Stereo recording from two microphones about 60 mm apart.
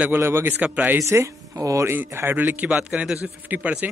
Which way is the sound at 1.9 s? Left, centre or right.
Right.